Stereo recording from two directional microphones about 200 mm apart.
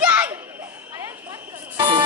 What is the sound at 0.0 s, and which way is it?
Children playing, 5° right (ahead or behind).